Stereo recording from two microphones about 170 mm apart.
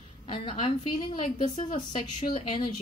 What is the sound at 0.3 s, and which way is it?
A woman's voice, 35° left (ahead or behind).